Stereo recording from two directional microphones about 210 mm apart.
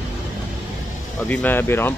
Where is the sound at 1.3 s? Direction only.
10° left (ahead or behind).